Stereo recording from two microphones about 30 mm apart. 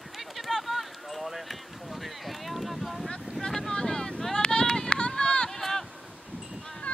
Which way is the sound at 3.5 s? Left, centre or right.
Left.